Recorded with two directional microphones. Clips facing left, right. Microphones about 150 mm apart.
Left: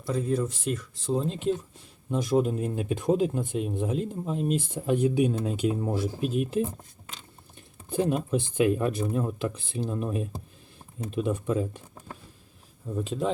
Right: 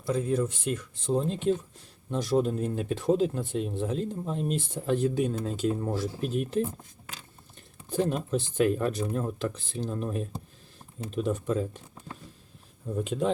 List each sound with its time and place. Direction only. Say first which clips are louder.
0.1 s speech: even; centre (ahead or behind)
7.9 s speech: left 2 dB; 10° left (ahead or behind)
13.1 s speech: right 1 dB; centre (ahead or behind)